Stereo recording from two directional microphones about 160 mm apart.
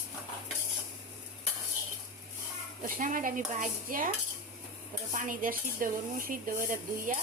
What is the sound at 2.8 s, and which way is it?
Speech, 55° right (ahead or behind).